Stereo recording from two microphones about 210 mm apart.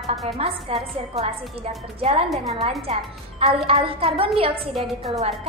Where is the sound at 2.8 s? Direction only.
30° right (ahead or behind).